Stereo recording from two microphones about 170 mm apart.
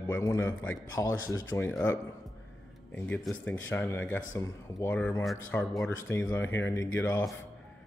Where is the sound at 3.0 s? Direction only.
10° left (ahead or behind).